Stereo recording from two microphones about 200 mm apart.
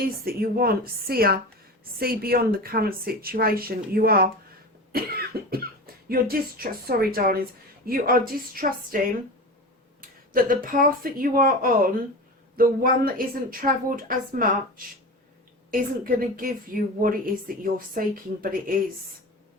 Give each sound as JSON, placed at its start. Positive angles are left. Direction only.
{"t": 0.0, "sound": "speech", "side_deg": -50}
{"t": 10.0, "sound": "speech", "side_deg": -45}